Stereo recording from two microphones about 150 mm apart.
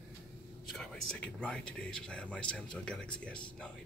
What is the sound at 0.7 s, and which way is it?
Speech, 5° left (ahead or behind).